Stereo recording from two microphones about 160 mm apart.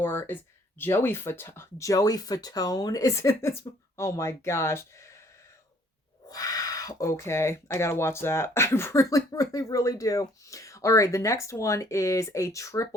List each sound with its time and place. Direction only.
0.0 s speech: 15° left (ahead or behind)
6.2 s speech: 25° left (ahead or behind)